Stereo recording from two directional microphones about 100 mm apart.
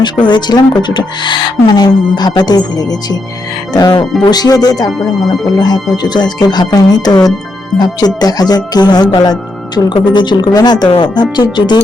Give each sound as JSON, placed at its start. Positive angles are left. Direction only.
{"t": 0.0, "sound": "speech", "side_deg": 50}
{"t": 10.8, "sound": "speech", "side_deg": 65}
{"t": 11.1, "sound": "speech", "side_deg": 45}